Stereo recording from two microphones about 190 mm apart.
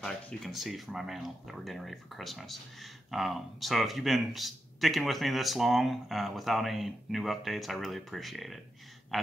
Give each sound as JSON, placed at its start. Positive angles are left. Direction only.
{"t": 0.0, "sound": "speech", "side_deg": 0}